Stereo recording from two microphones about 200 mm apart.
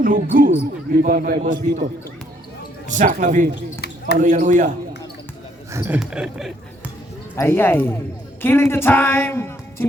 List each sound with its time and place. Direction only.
0.0 s a man's voice: 45° right (ahead or behind)
3.5 s a sound: 55° left (ahead or behind)
4.2 s a man's voice: 40° right (ahead or behind)
5.7 s speech: 10° right (ahead or behind)
7.3 s speech: 10° left (ahead or behind)